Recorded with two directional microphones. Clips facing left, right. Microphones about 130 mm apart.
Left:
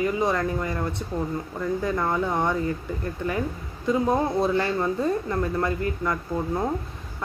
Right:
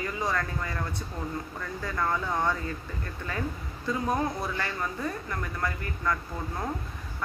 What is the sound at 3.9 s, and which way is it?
Speech, 25° left (ahead or behind).